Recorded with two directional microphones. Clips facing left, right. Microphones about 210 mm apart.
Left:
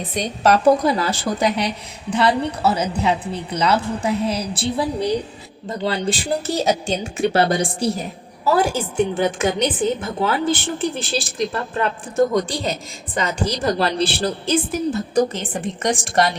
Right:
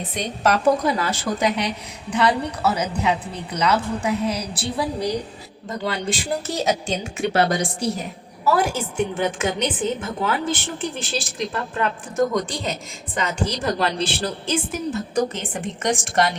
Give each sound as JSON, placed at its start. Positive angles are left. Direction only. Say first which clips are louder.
{"t": 0.1, "sound": "a woman's voice", "louder": "left 4 dB", "side_deg": 35}